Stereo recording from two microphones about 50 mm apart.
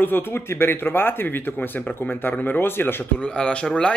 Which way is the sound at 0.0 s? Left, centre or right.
Left.